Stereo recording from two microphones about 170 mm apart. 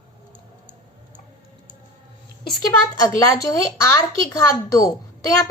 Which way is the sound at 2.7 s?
20° left (ahead or behind).